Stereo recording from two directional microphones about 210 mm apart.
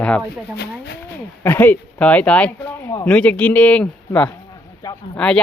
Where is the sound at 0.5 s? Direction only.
50° left (ahead or behind).